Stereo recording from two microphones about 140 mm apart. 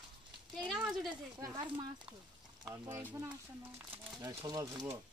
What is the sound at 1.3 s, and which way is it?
Speech, 25° right (ahead or behind).